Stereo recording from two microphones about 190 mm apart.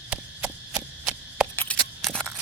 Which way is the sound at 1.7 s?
5° left (ahead or behind).